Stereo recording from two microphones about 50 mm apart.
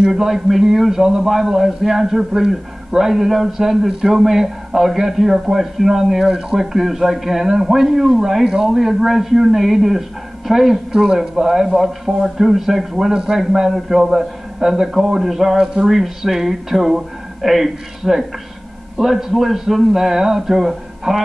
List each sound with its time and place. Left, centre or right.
0.0 s a man's voice: centre
10.9 s a man's voice: centre